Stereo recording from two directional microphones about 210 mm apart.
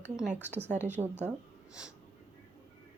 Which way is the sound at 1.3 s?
5° right (ahead or behind).